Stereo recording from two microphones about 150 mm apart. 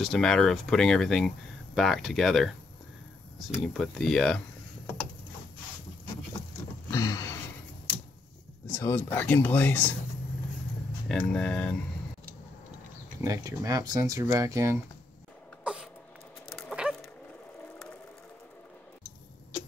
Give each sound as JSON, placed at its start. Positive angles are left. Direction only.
{"t": 0.0, "sound": "speech", "side_deg": 5}
{"t": 6.9, "sound": "a sound", "side_deg": 25}
{"t": 8.7, "sound": "speech", "side_deg": 15}
{"t": 11.1, "sound": "speech", "side_deg": 5}
{"t": 13.2, "sound": "speech", "side_deg": -20}
{"t": 15.6, "sound": "cough", "side_deg": -5}
{"t": 16.4, "sound": "dog", "side_deg": 0}